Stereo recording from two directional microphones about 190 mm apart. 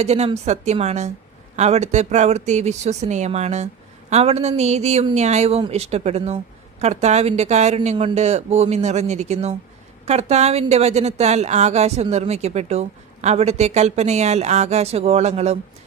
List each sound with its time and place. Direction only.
0.0 s a woman's voice: 35° right (ahead or behind)